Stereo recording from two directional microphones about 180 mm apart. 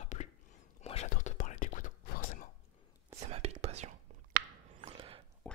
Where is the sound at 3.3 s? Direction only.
35° right (ahead or behind).